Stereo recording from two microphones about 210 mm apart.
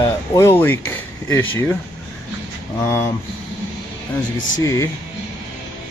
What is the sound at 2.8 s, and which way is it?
Speech, 10° left (ahead or behind).